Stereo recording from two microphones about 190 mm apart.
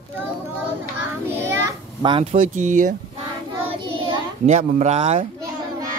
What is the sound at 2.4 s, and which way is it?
Speech, 40° right (ahead or behind).